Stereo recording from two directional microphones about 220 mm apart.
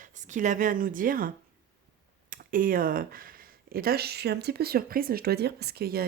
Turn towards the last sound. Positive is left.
turn(degrees=-45)  # may be behind; listen again after turning